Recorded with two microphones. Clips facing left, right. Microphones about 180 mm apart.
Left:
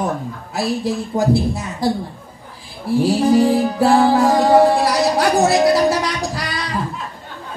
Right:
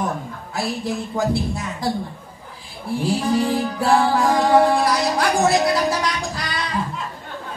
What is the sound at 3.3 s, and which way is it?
Music, 35° left (ahead or behind).